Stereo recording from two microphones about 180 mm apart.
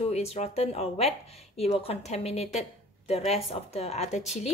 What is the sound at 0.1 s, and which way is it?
Speech, 35° left (ahead or behind).